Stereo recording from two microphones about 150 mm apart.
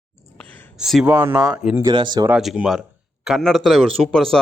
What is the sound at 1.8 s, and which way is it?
Speech, 30° right (ahead or behind).